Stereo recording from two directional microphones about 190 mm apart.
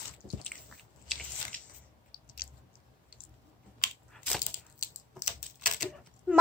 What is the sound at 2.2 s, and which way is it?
Chewing, 50° left (ahead or behind).